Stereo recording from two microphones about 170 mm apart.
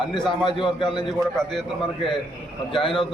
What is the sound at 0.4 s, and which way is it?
Speech, 25° left (ahead or behind).